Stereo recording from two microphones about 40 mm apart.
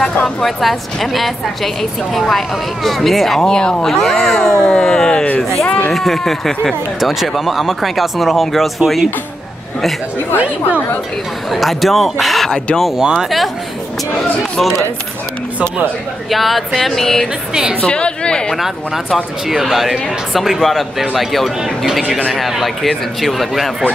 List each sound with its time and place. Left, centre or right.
0.0 s speech: centre
0.6 s a woman's voice: centre
4.6 s a sound: centre
5.9 s speech: centre
7.0 s a woman's voice: centre
10.3 s speech: right
11.5 s a woman's voice: centre
13.0 s speech: centre
16.3 s a woman's voice: centre
17.8 s a sound: left
19.5 s a woman's voice: centre